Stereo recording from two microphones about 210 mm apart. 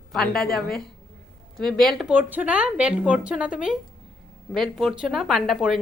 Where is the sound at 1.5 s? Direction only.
Centre (ahead or behind).